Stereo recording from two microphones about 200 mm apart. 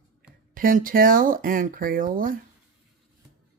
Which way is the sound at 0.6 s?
45° right (ahead or behind).